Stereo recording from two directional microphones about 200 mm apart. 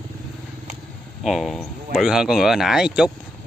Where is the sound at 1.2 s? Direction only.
Centre (ahead or behind).